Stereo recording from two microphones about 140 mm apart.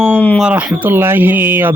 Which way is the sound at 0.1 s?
10° left (ahead or behind).